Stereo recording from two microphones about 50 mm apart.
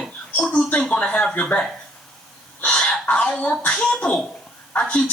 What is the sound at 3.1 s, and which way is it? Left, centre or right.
Speech, left.